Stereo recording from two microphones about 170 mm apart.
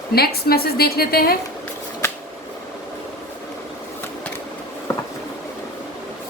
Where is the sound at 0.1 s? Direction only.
65° left (ahead or behind).